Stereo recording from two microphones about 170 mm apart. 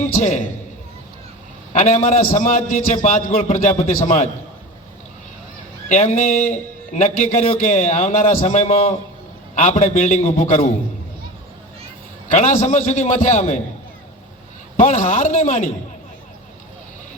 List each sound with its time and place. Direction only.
0.2 s a man's voice: 45° left (ahead or behind)
1.8 s a man's voice: 45° left (ahead or behind)
6.0 s a man's voice: 50° left (ahead or behind)
12.3 s a man's voice: 45° left (ahead or behind)
14.8 s a man's voice: 45° left (ahead or behind)